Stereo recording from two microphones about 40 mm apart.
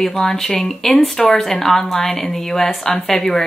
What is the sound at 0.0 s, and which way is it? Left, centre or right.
Speech, centre.